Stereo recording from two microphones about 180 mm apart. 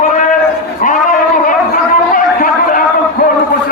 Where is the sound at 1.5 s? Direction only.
50° left (ahead or behind).